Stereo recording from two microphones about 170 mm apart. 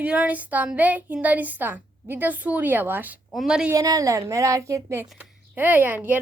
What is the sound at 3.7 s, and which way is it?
A woman's voice, 20° right (ahead or behind).